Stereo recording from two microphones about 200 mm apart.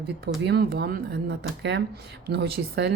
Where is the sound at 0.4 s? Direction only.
50° right (ahead or behind).